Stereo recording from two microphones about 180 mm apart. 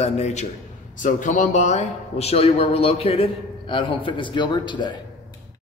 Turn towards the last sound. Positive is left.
turn(degrees=25)  # may be behind; listen again after turning